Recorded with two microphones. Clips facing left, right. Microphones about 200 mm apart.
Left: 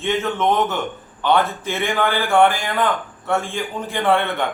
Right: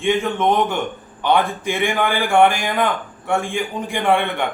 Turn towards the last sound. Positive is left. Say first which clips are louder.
# even
turn(degrees=-15)  # may be behind; listen again after turning